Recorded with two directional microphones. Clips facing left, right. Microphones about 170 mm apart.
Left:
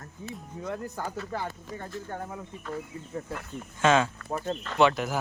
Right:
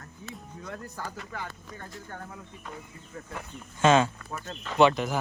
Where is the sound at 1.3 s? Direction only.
35° left (ahead or behind).